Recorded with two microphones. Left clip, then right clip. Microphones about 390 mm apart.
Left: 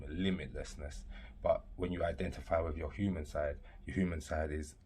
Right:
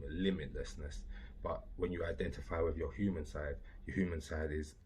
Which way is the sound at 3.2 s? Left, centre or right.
Left.